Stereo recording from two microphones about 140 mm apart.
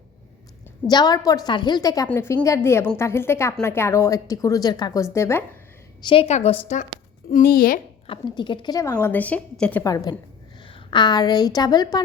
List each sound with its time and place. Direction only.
0.9 s a woman's voice: 30° left (ahead or behind)
6.0 s a woman's voice: 35° left (ahead or behind)
6.2 s a woman's voice: 50° left (ahead or behind)
7.3 s speech: 85° left
8.0 s a woman's voice: 40° left (ahead or behind); by 9.8 s 10° left (ahead or behind)
9.8 s a woman's voice: 25° left (ahead or behind)